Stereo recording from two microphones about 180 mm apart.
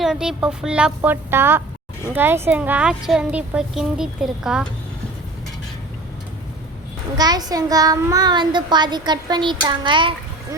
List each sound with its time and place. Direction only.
0.0 s a woman's voice: 5° right (ahead or behind)
7.2 s a child's voice: 20° right (ahead or behind)